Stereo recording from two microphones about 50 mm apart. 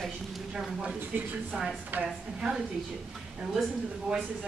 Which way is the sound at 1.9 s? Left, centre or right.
Right.